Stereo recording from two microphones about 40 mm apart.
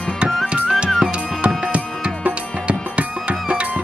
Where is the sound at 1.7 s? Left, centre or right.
Right.